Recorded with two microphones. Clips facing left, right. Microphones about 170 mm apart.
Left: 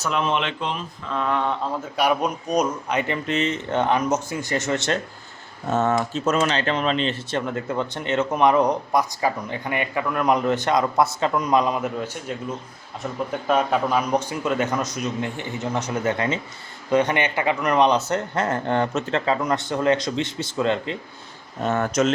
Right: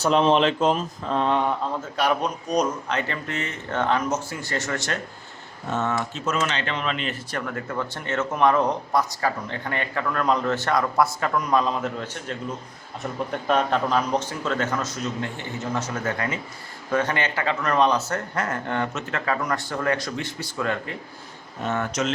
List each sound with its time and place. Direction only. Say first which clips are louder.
0.0 s speech: right 5 dB; 30° right (ahead or behind)
1.3 s speech: even; 15° right (ahead or behind)
2.0 s speech: left 2 dB; 10° left (ahead or behind)
5.7 s speech: left 5 dB; 40° left (ahead or behind); by 21.0 s 20° left (ahead or behind)
21.7 s speech: left 5 dB; 45° left (ahead or behind)